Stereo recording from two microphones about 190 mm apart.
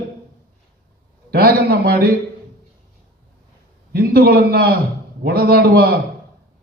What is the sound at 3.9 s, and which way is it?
A man's voice, 55° right (ahead or behind).